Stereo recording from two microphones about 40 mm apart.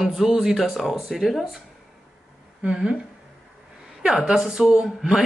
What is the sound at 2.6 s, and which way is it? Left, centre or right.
Speech, centre.